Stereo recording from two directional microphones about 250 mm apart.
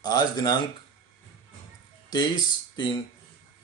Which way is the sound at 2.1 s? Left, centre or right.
Centre.